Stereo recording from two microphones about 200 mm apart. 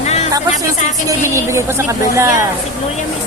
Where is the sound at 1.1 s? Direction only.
15° right (ahead or behind).